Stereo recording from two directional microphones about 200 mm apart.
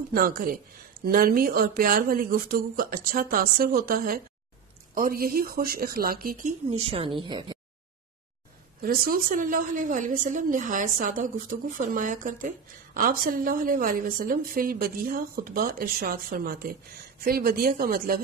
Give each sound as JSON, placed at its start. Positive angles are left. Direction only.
{"t": 0.1, "sound": "a woman's voice", "side_deg": -45}
{"t": 6.8, "sound": "a woman's voice", "side_deg": -30}
{"t": 8.8, "sound": "a woman's voice", "side_deg": -45}